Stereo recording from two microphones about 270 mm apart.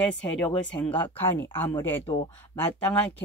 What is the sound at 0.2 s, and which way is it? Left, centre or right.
Speech, centre.